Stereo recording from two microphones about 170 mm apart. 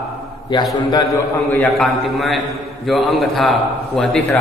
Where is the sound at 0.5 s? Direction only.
25° left (ahead or behind).